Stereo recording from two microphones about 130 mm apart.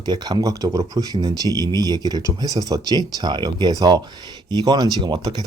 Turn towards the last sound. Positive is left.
turn(degrees=-35)  # may be behind; listen again after turning